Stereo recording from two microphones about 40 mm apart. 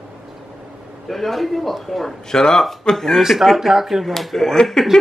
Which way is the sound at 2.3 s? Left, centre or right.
Centre.